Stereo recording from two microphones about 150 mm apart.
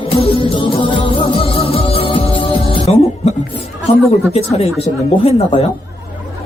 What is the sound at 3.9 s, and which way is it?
Speech, 45° left (ahead or behind).